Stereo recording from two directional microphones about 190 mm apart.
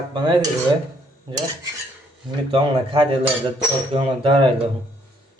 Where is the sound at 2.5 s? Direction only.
30° right (ahead or behind).